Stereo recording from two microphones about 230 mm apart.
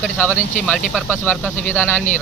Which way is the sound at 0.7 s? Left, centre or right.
Centre.